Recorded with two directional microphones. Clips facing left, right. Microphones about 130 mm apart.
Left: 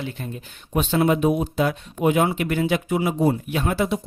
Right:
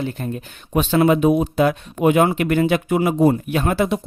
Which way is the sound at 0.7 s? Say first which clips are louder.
Right 4 dB; 85° right.